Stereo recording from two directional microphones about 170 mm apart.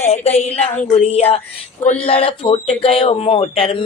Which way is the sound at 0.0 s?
35° left (ahead or behind).